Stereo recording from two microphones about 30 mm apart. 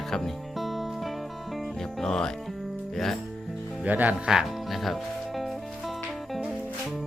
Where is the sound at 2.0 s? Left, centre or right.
Centre.